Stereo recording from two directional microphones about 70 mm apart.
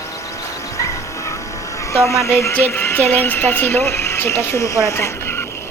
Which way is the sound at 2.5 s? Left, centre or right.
Left.